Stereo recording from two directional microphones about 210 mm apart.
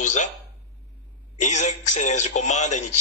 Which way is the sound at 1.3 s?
35° left (ahead or behind).